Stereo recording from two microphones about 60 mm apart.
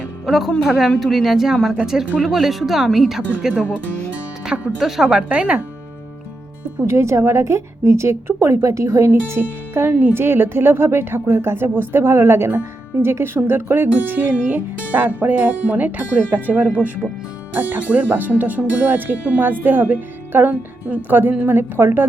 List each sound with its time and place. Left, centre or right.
0.3 s speech: centre
4.8 s speech: centre
5.0 s speech: centre
6.8 s a woman's voice: right
9.4 s speech: right